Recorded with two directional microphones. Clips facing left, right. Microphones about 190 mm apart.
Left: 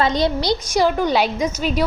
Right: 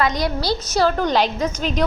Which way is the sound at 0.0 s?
25° left (ahead or behind).